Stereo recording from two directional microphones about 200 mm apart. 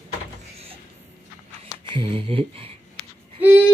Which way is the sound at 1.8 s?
25° right (ahead or behind).